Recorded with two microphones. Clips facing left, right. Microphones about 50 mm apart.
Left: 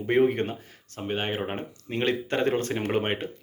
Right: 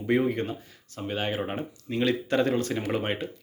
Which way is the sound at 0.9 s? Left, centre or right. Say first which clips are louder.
Even; left.